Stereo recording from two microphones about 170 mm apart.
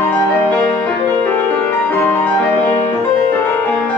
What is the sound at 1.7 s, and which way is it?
Music, 10° left (ahead or behind).